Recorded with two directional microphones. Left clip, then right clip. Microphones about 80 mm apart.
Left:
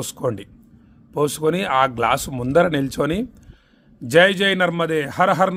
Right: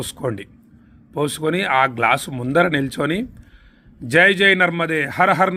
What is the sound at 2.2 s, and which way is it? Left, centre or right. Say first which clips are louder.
Speech: even; left.